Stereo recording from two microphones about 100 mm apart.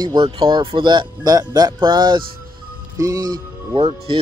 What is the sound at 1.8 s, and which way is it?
Speech, 50° right (ahead or behind).